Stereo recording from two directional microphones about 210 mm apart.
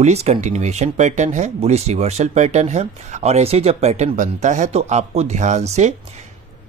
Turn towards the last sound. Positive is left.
turn(degrees=-35)  # may be behind; listen again after turning